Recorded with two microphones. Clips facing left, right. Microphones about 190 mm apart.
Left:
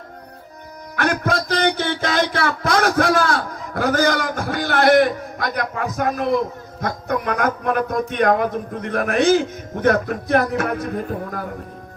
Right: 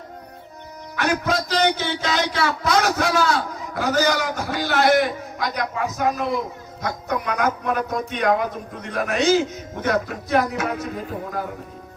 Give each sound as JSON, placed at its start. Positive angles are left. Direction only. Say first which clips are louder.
{"t": 0.9, "sound": "speech", "louder": "left 2 dB", "side_deg": 55}